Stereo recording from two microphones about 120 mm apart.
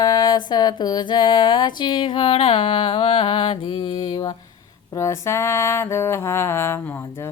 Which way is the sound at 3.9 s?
30° left (ahead or behind).